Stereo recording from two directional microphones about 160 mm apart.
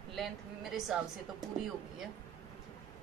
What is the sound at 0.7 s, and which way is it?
Speech, centre (ahead or behind).